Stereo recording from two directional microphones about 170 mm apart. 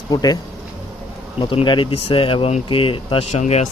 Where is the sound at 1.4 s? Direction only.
30° left (ahead or behind).